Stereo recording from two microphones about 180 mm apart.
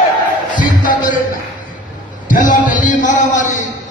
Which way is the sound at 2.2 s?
45° left (ahead or behind).